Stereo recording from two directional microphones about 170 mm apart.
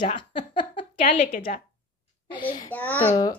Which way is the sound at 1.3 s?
50° left (ahead or behind).